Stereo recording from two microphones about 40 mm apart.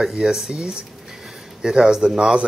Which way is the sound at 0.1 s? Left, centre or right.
Centre.